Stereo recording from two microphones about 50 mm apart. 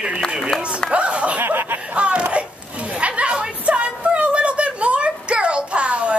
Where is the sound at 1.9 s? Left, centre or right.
Right.